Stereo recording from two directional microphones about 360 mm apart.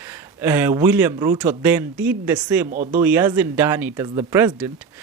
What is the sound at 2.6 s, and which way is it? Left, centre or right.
Speech, right.